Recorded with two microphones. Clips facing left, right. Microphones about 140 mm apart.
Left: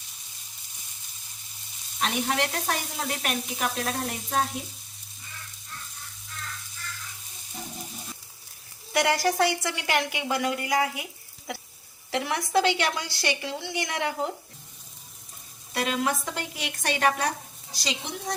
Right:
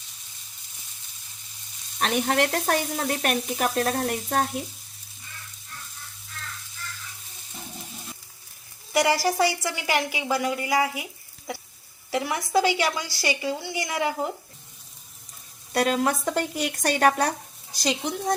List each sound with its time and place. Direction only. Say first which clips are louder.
2.0 s a woman's voice: right 4 dB; 55° right (ahead or behind)
8.9 s a woman's voice: right 2 dB; centre (ahead or behind)
15.7 s a woman's voice: right 4 dB; 45° right (ahead or behind)